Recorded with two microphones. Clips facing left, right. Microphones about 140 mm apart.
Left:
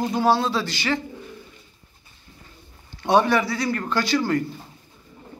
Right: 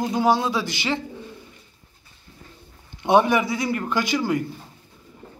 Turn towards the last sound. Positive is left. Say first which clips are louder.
# left 1 dB
turn(degrees=-15)  # may be behind; listen again after turning